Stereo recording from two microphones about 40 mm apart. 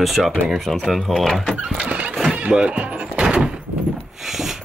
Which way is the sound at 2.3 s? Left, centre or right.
Right.